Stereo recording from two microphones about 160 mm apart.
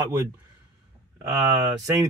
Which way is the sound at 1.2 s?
15° right (ahead or behind).